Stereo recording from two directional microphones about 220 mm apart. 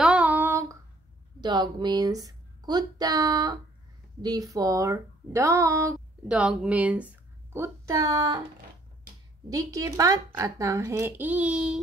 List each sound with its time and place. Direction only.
0.0 s female singing: 5° right (ahead or behind)
1.4 s speech: 20° right (ahead or behind)
9.5 s speech: 15° right (ahead or behind)